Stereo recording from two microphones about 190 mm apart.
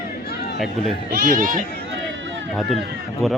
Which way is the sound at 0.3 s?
60° left (ahead or behind).